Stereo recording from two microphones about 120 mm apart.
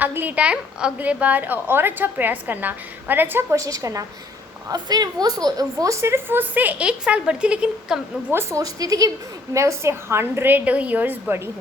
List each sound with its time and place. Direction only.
0.0 s a woman's voice: 15° right (ahead or behind)
3.5 s a woman's voice: 30° right (ahead or behind); by 7.9 s 10° right (ahead or behind)
8.3 s a woman's voice: 20° right (ahead or behind)